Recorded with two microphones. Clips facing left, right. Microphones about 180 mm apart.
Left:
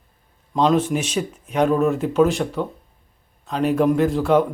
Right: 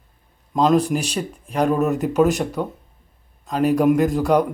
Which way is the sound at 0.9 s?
35° right (ahead or behind).